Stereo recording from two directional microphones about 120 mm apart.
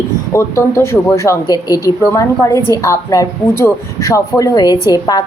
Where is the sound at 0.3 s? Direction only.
25° left (ahead or behind).